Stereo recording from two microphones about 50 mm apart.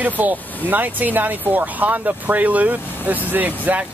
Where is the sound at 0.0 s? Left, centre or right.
Right.